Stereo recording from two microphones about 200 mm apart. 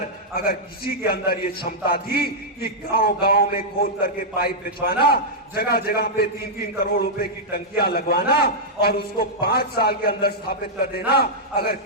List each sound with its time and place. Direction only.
0.3 s a man's voice: 50° left (ahead or behind)